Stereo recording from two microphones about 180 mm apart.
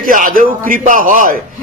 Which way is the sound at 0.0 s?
50° right (ahead or behind).